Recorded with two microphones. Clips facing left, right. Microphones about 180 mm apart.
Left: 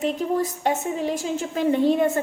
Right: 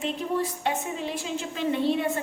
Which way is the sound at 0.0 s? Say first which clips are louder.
Left 5 dB; 40° left (ahead or behind).